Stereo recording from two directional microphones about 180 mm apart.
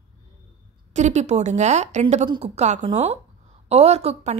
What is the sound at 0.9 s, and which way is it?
A woman's voice, 40° right (ahead or behind).